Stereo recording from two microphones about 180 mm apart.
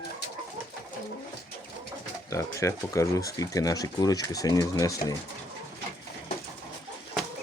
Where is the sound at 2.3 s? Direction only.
15° left (ahead or behind).